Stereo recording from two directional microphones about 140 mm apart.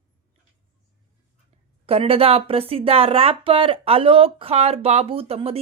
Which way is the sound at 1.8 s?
45° right (ahead or behind).